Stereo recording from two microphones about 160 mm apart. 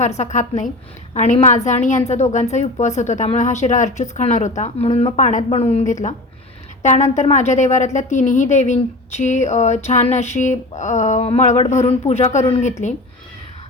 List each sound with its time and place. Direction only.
0.2 s a woman's voice: 45° left (ahead or behind)